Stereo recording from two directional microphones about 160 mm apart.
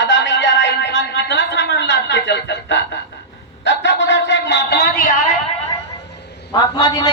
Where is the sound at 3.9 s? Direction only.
90° left; by 5.1 s 70° left (ahead or behind).